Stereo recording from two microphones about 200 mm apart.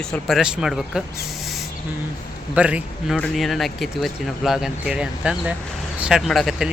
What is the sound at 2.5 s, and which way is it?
Speech, 5° right (ahead or behind).